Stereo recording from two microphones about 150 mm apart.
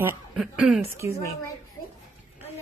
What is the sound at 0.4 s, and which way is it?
Speech, 5° right (ahead or behind).